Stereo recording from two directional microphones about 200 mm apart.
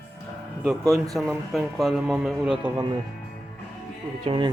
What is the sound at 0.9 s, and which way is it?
Speech, centre (ahead or behind).